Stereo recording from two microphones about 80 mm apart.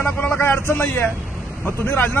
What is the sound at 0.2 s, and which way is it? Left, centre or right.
A man's voice, left.